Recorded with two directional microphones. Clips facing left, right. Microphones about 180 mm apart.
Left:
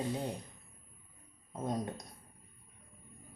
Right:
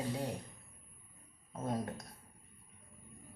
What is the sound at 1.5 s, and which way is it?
Speech, 15° left (ahead or behind).